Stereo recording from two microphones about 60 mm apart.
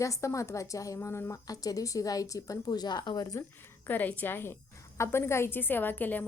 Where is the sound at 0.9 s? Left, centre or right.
Left.